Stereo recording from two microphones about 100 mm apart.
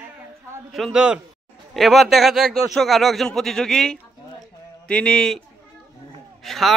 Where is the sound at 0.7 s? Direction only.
5° right (ahead or behind).